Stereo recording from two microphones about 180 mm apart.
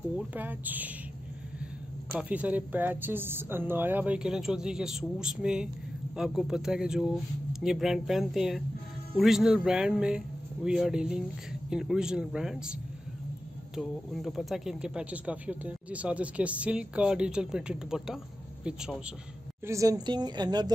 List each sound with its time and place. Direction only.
0.3 s a woman's voice: 10° right (ahead or behind)
2.1 s a woman's voice: 10° right (ahead or behind)
13.7 s speech: centre (ahead or behind)
19.6 s a woman's voice: 15° right (ahead or behind)